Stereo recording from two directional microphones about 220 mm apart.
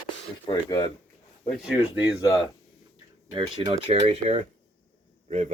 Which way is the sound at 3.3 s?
20° right (ahead or behind).